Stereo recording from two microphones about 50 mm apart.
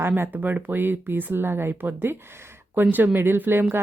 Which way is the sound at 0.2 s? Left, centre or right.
Right.